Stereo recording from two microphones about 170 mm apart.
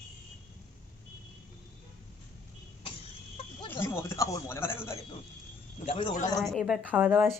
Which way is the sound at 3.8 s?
15° left (ahead or behind).